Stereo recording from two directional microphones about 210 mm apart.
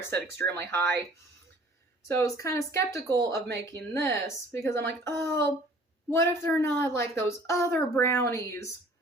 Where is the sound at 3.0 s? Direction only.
15° right (ahead or behind).